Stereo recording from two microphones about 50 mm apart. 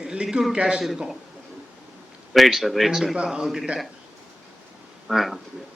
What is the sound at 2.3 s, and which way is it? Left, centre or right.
Speech, centre.